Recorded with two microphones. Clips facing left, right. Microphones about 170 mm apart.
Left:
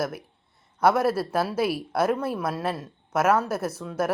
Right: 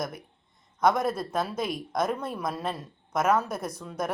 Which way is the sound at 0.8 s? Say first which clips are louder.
Left 3 dB; 5° left (ahead or behind).